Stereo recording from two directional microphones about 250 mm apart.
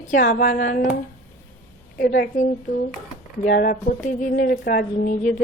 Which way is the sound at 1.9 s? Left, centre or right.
Left.